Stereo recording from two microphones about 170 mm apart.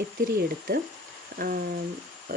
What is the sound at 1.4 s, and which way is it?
Speech, 60° right (ahead or behind).